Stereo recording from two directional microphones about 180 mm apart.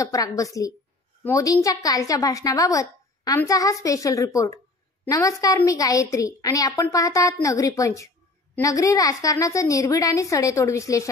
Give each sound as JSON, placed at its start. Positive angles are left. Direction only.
{"t": 0.0, "sound": "a woman's voice", "side_deg": 20}